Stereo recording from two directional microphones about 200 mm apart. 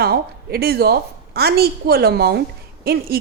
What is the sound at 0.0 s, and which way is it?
A woman's voice, 50° right (ahead or behind).